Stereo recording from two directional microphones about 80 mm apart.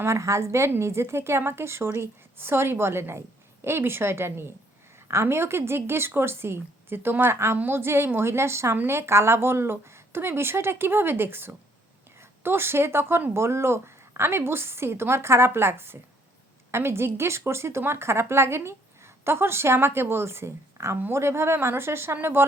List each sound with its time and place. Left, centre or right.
0.0 s a woman's voice: right